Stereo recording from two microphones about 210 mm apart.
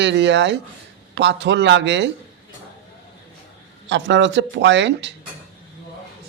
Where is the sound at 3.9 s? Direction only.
60° right (ahead or behind).